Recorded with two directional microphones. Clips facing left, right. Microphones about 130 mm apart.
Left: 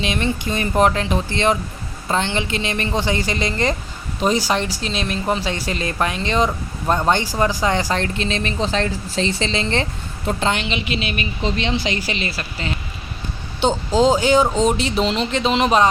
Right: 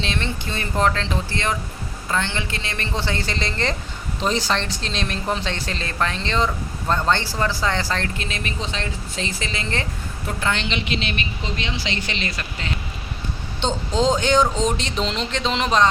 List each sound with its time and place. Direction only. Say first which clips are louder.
0.0 s a woman's voice: left 5 dB; 15° left (ahead or behind)
10.6 s a woman's voice: left 2 dB; 5° left (ahead or behind)
13.6 s speech: left 5 dB; 10° left (ahead or behind)